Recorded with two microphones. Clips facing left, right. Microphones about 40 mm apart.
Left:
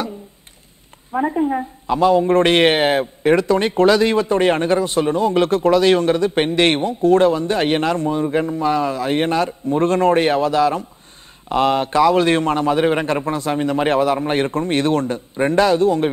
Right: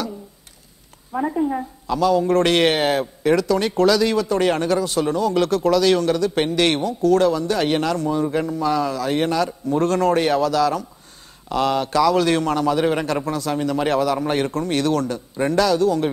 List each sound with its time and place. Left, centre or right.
1.1 s a woman's voice: left